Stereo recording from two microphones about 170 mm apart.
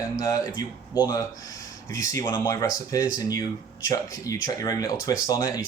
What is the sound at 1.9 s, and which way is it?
Speech, 20° left (ahead or behind).